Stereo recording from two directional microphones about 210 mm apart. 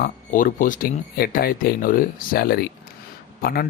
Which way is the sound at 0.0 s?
40° left (ahead or behind).